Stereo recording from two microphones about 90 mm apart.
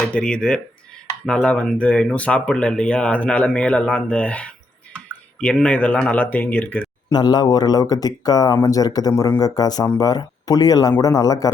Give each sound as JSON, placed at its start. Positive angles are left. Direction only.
{"t": 0.1, "sound": "speech", "side_deg": 10}
{"t": 7.1, "sound": "speech", "side_deg": 50}